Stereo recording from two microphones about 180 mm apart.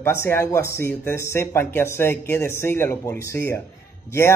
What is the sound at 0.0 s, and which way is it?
Speech, 15° left (ahead or behind).